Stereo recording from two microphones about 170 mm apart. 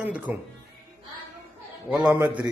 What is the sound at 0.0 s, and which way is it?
Speech, 10° right (ahead or behind).